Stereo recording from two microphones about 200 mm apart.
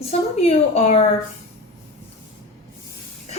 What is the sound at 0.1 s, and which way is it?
Speech, 30° left (ahead or behind).